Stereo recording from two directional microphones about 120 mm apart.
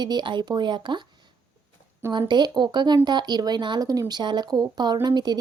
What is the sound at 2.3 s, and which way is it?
Speech, 35° right (ahead or behind).